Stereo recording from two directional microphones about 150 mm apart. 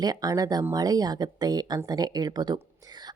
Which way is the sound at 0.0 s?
25° right (ahead or behind).